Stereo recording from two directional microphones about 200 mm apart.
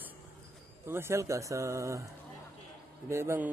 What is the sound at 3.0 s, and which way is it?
Mantra, 15° right (ahead or behind).